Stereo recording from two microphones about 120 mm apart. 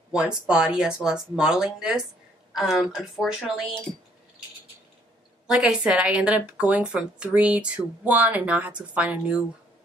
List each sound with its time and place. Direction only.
0.1 s speech: 5° right (ahead or behind)
5.5 s a woman's voice: 5° right (ahead or behind)